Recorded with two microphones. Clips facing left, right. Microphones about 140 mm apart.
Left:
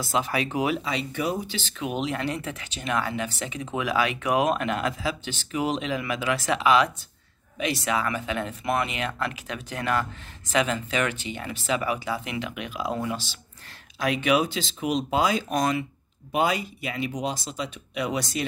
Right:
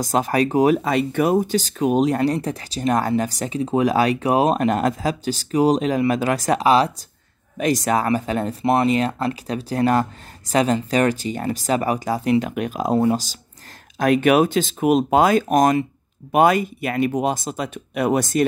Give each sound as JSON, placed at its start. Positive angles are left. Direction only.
{"t": 0.0, "sound": "speech", "side_deg": -45}